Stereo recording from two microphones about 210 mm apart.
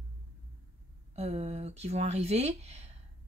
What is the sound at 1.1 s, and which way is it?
Speech, 30° right (ahead or behind).